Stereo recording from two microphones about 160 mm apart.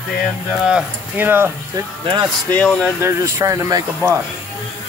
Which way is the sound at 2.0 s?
25° right (ahead or behind).